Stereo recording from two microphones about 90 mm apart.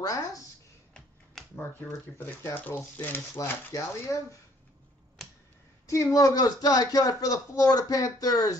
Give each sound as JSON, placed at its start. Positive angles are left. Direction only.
{"t": 0.0, "sound": "speech", "side_deg": 40}
{"t": 2.1, "sound": "speech", "side_deg": 20}
{"t": 3.3, "sound": "speech", "side_deg": 35}
{"t": 5.9, "sound": "speech", "side_deg": 35}